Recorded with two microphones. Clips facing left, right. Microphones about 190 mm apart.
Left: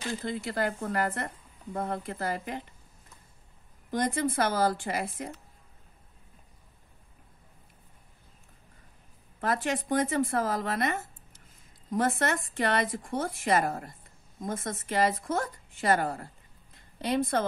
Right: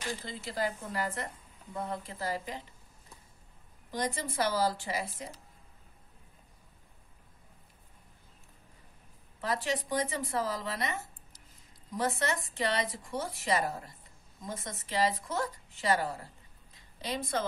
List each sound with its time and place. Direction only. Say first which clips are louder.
0.2 s speech: left 6 dB; 60° left (ahead or behind)
3.9 s a woman's voice: left 6 dB; 55° left (ahead or behind)
9.4 s a woman's voice: left 3 dB; 50° left (ahead or behind)
16.7 s a sound: left 8 dB; 55° left (ahead or behind)